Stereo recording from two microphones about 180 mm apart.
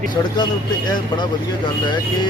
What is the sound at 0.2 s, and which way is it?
Speech, 20° left (ahead or behind).